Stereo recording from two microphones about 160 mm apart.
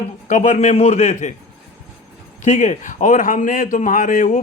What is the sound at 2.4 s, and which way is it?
Speech, 50° left (ahead or behind).